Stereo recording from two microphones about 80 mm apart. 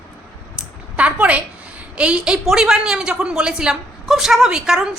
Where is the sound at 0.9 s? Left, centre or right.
Centre.